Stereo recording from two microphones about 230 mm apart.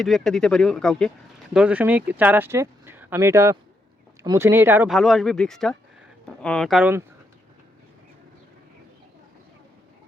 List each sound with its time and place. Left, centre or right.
0.0 s speech: centre